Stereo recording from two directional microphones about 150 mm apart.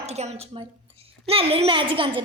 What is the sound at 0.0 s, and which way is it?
A woman's voice, 45° right (ahead or behind).